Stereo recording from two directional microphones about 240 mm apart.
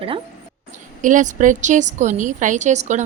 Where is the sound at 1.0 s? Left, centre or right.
Right.